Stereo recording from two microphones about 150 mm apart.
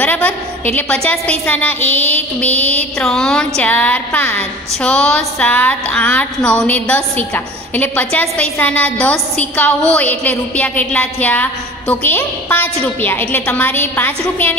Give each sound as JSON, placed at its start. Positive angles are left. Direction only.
{"t": 0.0, "sound": "a woman's voice", "side_deg": 10}
{"t": 2.1, "sound": "a sound", "side_deg": -45}
{"t": 3.0, "sound": "a woman's voice", "side_deg": 5}